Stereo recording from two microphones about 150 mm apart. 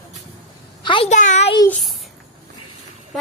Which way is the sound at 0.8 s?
35° left (ahead or behind).